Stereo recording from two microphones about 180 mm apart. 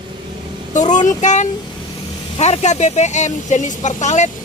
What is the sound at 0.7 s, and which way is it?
Speech, 40° left (ahead or behind).